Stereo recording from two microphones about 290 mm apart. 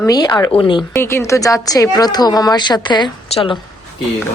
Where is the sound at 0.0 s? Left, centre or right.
Centre.